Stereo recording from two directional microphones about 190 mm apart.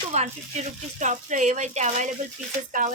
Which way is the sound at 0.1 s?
35° right (ahead or behind).